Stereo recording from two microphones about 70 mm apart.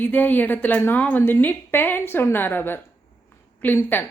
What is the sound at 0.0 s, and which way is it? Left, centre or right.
A woman's voice, left.